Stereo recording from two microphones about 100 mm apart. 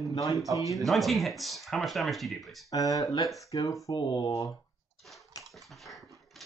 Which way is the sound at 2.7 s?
35° left (ahead or behind).